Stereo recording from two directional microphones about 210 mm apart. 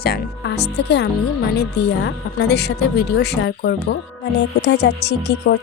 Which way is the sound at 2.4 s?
50° left (ahead or behind).